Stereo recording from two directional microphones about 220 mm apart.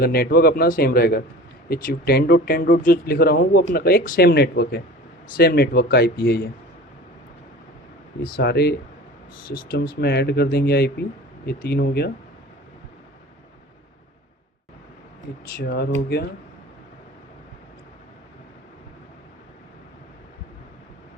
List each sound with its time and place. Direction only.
0.0 s speech: 45° left (ahead or behind)
8.4 s speech: 50° left (ahead or behind)
15.5 s speech: 45° left (ahead or behind)